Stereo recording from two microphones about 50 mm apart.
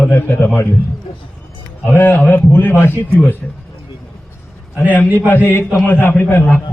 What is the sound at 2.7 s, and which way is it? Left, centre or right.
Speech, left.